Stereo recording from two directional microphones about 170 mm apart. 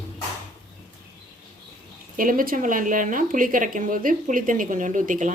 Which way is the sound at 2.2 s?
55° right (ahead or behind).